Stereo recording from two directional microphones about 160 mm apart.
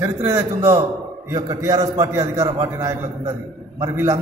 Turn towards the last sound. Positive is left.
turn(degrees=-20)  # may be behind; listen again after turning